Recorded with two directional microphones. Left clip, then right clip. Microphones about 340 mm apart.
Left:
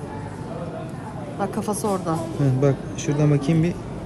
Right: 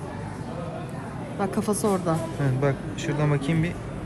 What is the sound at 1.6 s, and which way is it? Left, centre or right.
Speech, left.